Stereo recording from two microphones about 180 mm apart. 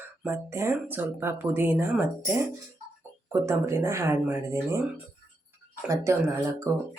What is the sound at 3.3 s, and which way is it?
Speech, 15° right (ahead or behind).